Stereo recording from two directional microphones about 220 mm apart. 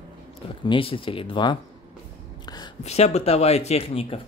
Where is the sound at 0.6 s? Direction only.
25° left (ahead or behind).